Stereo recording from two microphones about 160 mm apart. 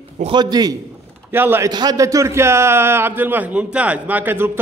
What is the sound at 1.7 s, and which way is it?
A man's voice, 25° right (ahead or behind).